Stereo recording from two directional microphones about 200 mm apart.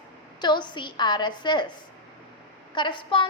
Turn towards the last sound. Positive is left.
turn(degrees=25)  # may be behind; listen again after turning